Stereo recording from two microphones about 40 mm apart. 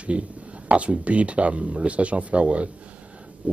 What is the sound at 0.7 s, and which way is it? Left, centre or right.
Speech, right.